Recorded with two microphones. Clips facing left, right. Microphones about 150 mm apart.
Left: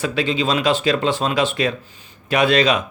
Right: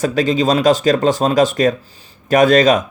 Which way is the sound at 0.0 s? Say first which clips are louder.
Right 5 dB; 40° right (ahead or behind).